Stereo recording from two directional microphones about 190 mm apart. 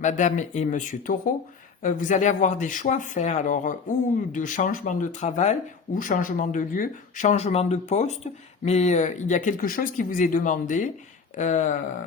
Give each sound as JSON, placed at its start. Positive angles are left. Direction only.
{"t": 0.0, "sound": "speech", "side_deg": 40}